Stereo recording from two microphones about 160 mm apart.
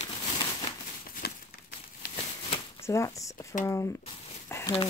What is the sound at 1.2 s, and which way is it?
Crumpling, 80° left.